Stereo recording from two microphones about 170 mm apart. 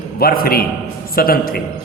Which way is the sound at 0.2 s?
60° left (ahead or behind).